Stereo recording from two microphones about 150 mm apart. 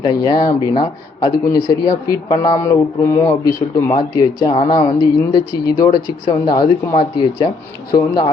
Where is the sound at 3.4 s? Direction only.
90° left.